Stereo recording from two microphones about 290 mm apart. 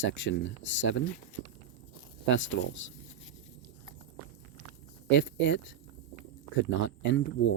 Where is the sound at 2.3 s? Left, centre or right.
Left.